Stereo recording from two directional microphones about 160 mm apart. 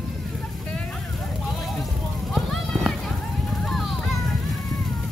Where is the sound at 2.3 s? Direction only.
Centre (ahead or behind).